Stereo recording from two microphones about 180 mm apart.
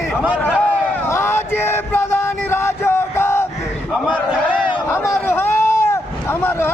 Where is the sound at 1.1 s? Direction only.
15° left (ahead or behind).